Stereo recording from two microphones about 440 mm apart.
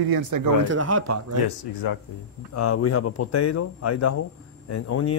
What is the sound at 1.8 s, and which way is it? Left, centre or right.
Speech, left.